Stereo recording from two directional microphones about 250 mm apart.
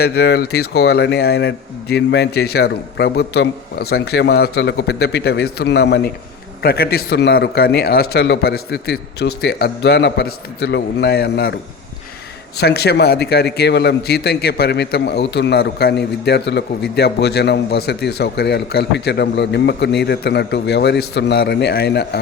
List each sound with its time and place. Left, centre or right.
0.0 s a man's voice: left